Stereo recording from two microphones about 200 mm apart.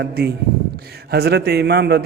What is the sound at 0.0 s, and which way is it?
A man's voice, 55° right (ahead or behind).